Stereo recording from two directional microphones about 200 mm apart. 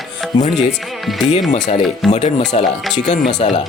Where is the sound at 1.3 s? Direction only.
35° left (ahead or behind).